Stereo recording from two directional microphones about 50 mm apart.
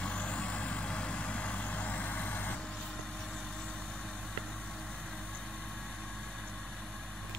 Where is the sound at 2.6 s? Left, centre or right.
Centre.